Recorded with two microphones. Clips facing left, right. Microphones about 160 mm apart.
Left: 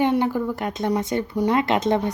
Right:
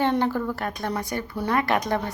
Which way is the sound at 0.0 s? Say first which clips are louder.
Left 2 dB; 15° left (ahead or behind).